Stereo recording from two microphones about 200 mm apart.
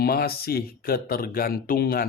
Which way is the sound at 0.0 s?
50° left (ahead or behind).